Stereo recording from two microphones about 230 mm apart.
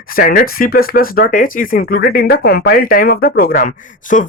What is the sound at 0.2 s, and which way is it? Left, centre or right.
Speech, left.